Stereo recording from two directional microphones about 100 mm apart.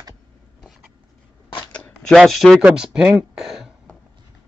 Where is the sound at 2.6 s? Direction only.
10° right (ahead or behind).